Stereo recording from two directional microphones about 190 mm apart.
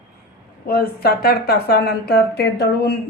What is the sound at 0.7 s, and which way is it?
Speech, 50° left (ahead or behind).